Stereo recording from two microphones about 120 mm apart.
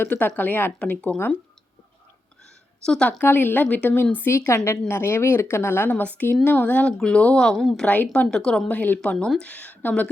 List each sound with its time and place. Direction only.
0.0 s speech: 15° left (ahead or behind)
2.8 s speech: 5° left (ahead or behind)